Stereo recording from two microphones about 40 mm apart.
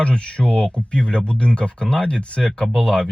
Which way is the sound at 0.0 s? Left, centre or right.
Left.